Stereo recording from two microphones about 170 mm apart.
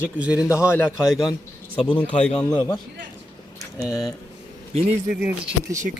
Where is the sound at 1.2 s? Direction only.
25° left (ahead or behind).